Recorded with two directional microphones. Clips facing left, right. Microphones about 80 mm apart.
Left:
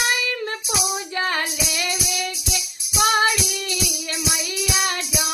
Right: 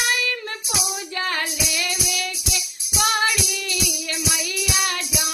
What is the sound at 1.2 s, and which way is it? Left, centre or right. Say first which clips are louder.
Music: left 1 dB; left.